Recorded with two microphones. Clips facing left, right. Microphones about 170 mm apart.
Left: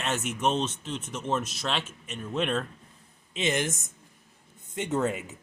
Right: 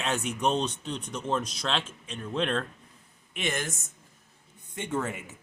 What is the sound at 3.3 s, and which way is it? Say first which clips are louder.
Speech: left 4 dB; 20° left (ahead or behind).